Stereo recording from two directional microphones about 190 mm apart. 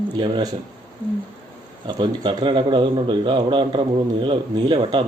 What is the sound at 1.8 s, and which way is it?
A man's voice, 25° right (ahead or behind).